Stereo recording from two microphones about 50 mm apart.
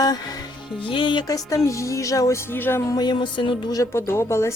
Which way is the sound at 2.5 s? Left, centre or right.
Left.